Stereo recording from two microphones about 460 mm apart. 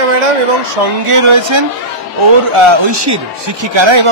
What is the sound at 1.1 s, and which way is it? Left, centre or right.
A man's voice, right.